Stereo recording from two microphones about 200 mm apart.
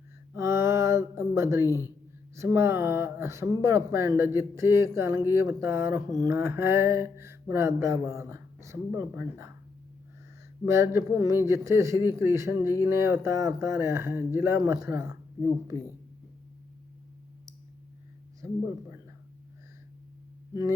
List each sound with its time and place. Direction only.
0.3 s a sound: 15° right (ahead or behind)
1.6 s speech: 15° left (ahead or behind)
2.3 s speech: 15° right (ahead or behind)
10.7 s speech: 15° right (ahead or behind)